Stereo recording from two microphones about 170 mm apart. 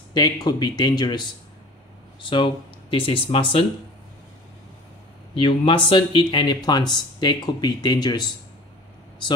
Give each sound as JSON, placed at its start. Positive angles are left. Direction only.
{"t": 0.1, "sound": "speech", "side_deg": 25}
{"t": 2.2, "sound": "speech", "side_deg": 30}
{"t": 5.3, "sound": "speech", "side_deg": 30}